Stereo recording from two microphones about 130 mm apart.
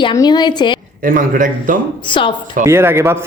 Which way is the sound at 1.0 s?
90° right.